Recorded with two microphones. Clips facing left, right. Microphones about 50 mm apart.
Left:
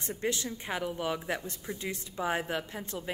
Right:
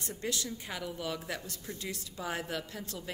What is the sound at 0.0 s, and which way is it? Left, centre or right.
A woman's voice, left.